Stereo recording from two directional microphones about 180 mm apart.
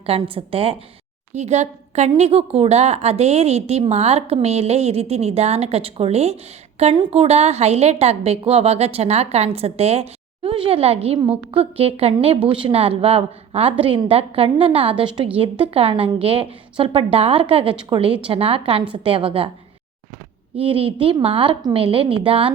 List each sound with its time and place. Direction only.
0.0 s a woman's voice: 30° right (ahead or behind)
20.6 s a woman's voice: 30° right (ahead or behind)